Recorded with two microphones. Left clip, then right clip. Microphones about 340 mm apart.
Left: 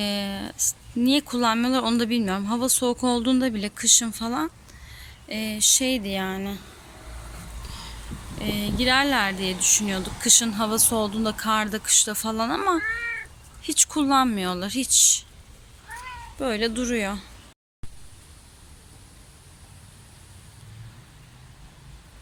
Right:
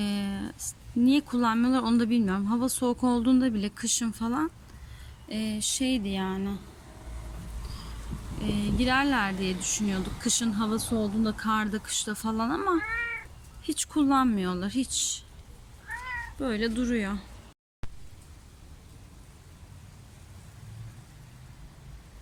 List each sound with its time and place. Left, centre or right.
0.0 s speech: centre
8.4 s speech: centre
10.9 s speech: left
11.3 s speech: centre
16.4 s speech: centre